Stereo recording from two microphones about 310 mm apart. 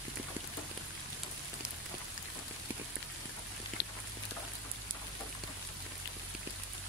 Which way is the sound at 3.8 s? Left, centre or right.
Left.